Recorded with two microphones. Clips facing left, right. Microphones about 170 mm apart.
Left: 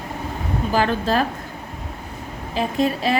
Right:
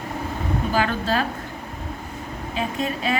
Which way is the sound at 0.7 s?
40° left (ahead or behind).